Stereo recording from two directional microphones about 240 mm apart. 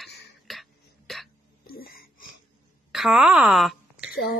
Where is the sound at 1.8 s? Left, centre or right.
Left.